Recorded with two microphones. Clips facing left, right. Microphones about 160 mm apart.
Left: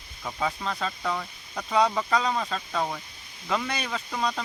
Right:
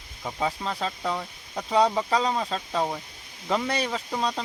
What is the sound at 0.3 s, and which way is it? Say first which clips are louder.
Speech: right 1 dB; 20° right (ahead or behind).